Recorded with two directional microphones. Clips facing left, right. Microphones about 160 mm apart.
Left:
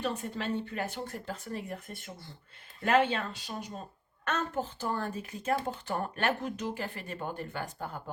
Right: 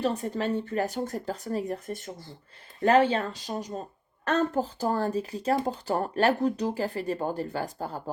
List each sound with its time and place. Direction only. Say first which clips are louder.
0.0 s speech: right 6 dB; 40° right (ahead or behind)